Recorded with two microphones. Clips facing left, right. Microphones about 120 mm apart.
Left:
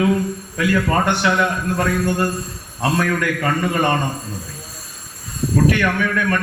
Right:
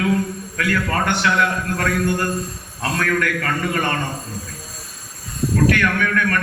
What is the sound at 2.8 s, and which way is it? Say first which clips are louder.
A man's voice: left 2 dB; 25° left (ahead or behind).